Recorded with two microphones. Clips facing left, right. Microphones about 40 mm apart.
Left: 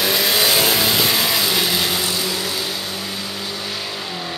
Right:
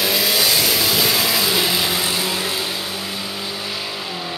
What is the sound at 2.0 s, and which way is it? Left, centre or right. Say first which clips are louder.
Vehicle: right 1 dB; right.